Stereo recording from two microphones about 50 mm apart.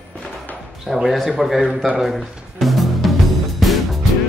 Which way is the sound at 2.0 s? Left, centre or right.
Centre.